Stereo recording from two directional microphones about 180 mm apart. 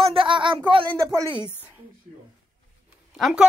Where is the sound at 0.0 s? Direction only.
30° right (ahead or behind).